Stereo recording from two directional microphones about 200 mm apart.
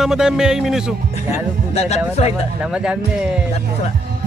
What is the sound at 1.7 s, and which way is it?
Speech, 30° left (ahead or behind).